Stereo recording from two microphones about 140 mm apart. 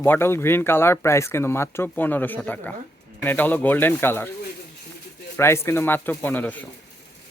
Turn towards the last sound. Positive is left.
turn(degrees=10)  # may be behind; listen again after turning